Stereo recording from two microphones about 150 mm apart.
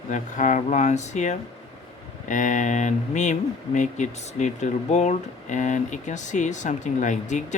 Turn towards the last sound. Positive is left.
turn(degrees=55)  # may be behind; listen again after turning